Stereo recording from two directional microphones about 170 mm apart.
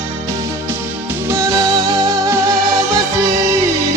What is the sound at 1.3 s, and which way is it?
Music, 15° right (ahead or behind).